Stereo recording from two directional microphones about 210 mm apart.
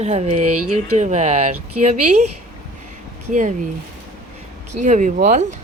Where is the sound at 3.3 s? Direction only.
35° right (ahead or behind).